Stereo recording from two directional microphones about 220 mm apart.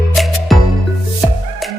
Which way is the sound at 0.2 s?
Centre (ahead or behind).